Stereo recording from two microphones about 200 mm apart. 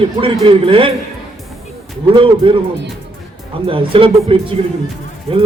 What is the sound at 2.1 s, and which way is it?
Speech, 25° right (ahead or behind).